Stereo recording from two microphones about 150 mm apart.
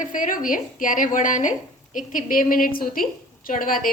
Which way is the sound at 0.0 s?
60° left (ahead or behind).